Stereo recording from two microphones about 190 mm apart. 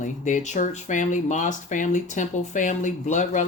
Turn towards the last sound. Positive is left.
turn(degrees=40)  # may be behind; listen again after turning